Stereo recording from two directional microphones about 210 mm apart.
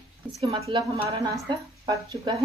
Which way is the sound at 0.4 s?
25° right (ahead or behind).